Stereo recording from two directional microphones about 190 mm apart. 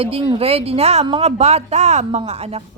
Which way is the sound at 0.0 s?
30° right (ahead or behind).